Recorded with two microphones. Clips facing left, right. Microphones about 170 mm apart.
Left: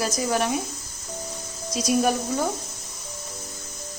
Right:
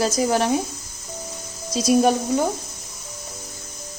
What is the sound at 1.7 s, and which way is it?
Speech, 25° right (ahead or behind).